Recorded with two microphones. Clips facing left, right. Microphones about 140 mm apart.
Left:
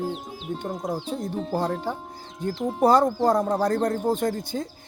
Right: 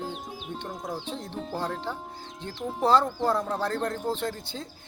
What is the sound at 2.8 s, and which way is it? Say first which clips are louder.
Speech: left 4 dB; 15° left (ahead or behind).